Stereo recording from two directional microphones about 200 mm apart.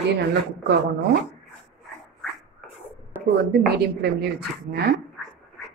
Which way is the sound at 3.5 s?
55° right (ahead or behind).